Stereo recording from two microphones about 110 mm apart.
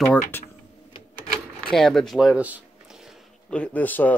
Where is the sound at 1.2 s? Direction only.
5° left (ahead or behind).